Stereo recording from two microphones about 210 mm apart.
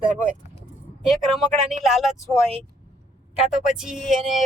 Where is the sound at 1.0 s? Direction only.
Centre (ahead or behind).